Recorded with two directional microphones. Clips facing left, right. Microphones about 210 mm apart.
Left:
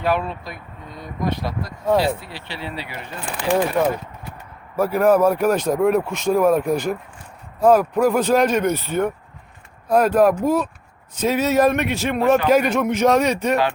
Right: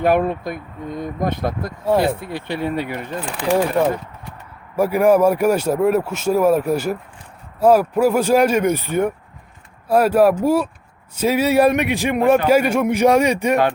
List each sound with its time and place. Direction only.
0.0 s speech: 50° right (ahead or behind)
4.8 s speech: 10° right (ahead or behind)